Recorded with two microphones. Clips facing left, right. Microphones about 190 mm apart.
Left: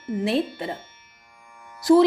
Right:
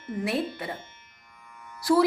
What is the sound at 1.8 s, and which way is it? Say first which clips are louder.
Speech: left 6 dB; 25° left (ahead or behind).